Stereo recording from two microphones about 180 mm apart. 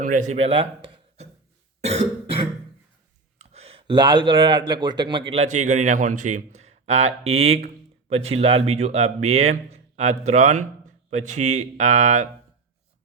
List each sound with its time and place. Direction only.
0.0 s speech: 45° right (ahead or behind)
1.8 s cough: 35° right (ahead or behind)
3.3 s a sound: 35° right (ahead or behind)
4.7 s a man's voice: 25° right (ahead or behind); by 12.3 s 40° right (ahead or behind)